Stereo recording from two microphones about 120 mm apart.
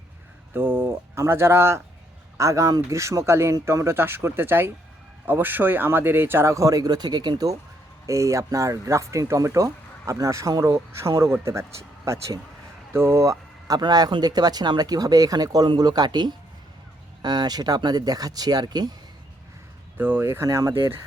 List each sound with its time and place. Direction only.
0.5 s speech: 15° right (ahead or behind); by 18.9 s 35° right (ahead or behind)
20.0 s speech: 15° right (ahead or behind)